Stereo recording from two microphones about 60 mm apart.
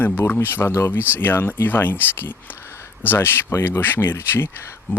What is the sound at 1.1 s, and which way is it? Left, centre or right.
Speech, left.